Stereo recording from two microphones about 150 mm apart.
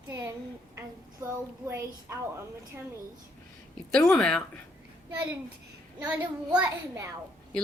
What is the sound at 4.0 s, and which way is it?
Speech, 5° left (ahead or behind).